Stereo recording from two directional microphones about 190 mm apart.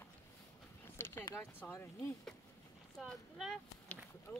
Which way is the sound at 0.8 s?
15° left (ahead or behind).